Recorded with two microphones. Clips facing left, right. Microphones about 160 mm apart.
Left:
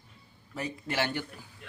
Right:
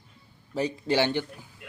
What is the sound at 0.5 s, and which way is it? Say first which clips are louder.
Speech: right 7 dB; 30° right (ahead or behind).